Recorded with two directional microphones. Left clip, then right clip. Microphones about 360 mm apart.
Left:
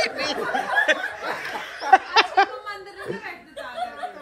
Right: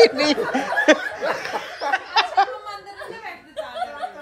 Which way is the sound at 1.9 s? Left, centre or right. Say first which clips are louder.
Left 4 dB; centre.